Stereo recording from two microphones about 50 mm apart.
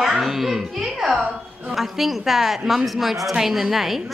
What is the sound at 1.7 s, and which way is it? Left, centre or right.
A woman's voice, centre.